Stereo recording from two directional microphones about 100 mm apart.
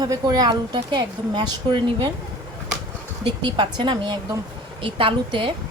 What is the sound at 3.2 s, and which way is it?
A woman's voice, 50° right (ahead or behind).